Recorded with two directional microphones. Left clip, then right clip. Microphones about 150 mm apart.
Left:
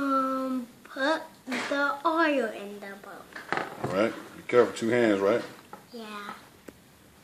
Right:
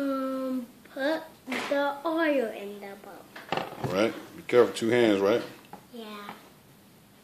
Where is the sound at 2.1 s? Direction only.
45° left (ahead or behind).